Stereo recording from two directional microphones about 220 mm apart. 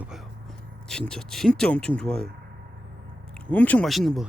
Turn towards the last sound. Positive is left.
turn(degrees=0)  # may be behind; listen again after turning